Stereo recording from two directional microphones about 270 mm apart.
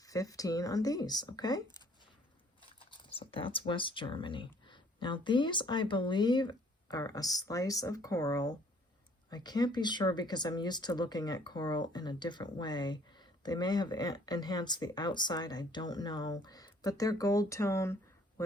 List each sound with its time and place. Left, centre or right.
0.0 s speech: centre